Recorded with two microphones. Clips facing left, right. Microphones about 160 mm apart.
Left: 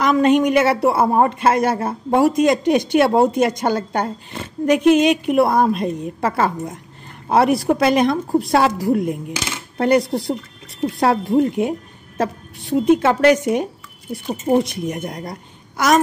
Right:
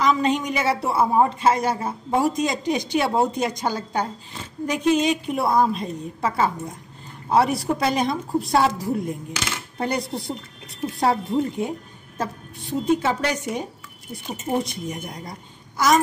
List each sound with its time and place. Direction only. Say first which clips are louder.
0.0 s a woman's voice: left 6 dB; 60° left (ahead or behind)
14.6 s a woman's voice: left 6 dB; 75° left (ahead or behind)